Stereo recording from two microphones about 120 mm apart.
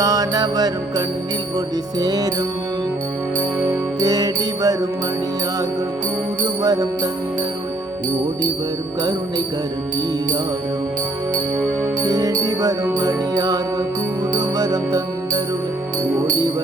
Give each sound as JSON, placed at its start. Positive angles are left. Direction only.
{"t": 0.0, "sound": "mantra", "side_deg": -30}
{"t": 4.0, "sound": "mantra", "side_deg": -30}
{"t": 6.6, "sound": "mantra", "side_deg": -30}
{"t": 12.0, "sound": "music", "side_deg": -30}